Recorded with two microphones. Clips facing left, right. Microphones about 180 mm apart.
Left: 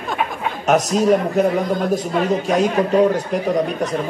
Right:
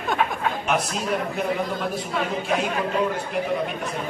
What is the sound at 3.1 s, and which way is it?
Speech, 40° left (ahead or behind).